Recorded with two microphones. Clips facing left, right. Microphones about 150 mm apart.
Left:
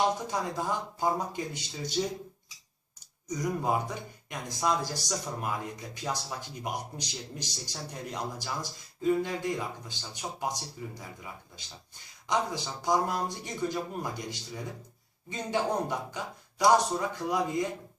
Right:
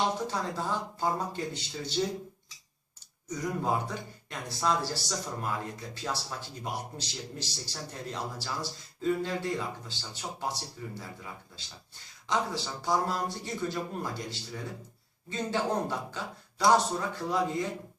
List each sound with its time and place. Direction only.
0.3 s speech: 15° left (ahead or behind)
3.2 s speech: 15° left (ahead or behind)